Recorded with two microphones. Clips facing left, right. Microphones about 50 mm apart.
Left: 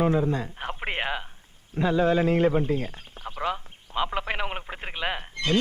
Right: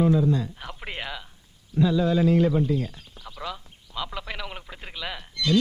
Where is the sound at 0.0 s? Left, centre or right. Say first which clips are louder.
Right 2 dB; left.